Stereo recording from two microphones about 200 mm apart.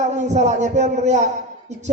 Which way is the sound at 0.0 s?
35° right (ahead or behind).